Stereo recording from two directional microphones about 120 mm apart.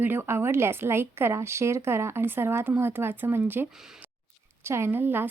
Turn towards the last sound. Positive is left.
turn(degrees=-15)  # may be behind; listen again after turning